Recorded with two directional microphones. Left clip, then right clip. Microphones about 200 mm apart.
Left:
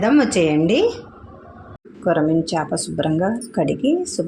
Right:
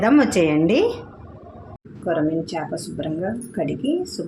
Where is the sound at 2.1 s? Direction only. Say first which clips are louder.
Left 4 dB; 40° left (ahead or behind).